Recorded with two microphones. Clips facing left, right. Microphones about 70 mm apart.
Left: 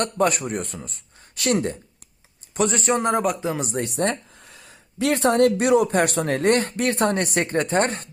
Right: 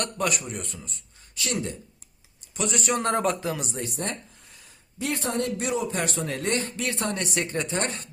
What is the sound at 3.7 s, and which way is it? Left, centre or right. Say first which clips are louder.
Speech: left 8 dB; left.